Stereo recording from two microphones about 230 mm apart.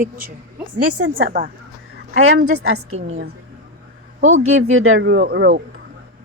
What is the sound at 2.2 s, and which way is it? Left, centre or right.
Speech, right.